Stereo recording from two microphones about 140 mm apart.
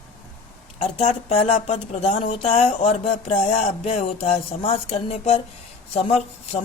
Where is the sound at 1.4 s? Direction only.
45° left (ahead or behind).